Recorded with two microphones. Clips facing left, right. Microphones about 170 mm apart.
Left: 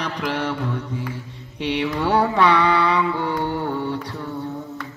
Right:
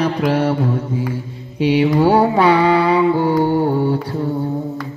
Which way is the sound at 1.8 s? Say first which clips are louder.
Right 5 dB; 35° right (ahead or behind).